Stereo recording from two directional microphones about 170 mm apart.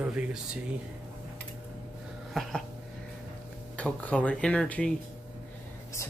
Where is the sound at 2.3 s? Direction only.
Centre (ahead or behind).